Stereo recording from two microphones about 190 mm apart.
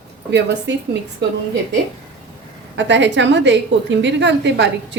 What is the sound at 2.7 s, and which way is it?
A woman's voice, 70° right (ahead or behind).